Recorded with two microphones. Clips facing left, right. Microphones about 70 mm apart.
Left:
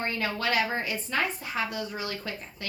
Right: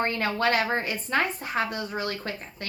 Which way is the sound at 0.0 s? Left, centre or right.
Right.